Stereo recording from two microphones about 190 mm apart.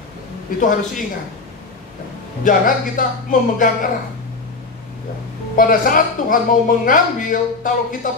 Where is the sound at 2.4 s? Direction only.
45° left (ahead or behind).